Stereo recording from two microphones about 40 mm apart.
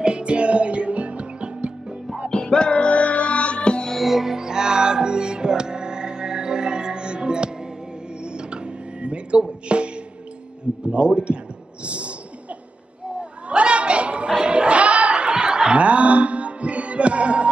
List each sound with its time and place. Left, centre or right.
0.0 s music: right
2.3 s music: centre
4.0 s music: centre; by 9.8 s right
10.9 s a man's voice: right
11.8 s a sound: right
13.2 s chatter: right
14.3 s a sound: right